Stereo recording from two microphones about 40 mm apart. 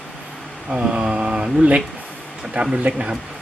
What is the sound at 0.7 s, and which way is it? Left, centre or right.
Speech, right.